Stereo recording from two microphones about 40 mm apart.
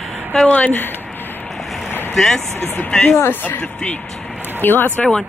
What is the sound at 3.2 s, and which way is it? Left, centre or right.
Speech, left.